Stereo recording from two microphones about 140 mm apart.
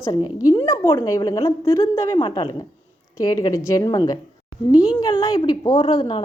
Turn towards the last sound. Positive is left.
turn(degrees=40)  # may be behind; listen again after turning